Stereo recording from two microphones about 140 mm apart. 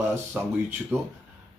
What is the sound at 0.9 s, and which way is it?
Speech, 15° right (ahead or behind).